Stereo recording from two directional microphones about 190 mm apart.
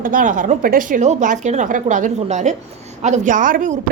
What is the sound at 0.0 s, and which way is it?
A woman's voice, 45° right (ahead or behind).